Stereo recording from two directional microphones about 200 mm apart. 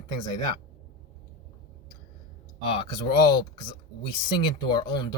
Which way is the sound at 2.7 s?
25° left (ahead or behind).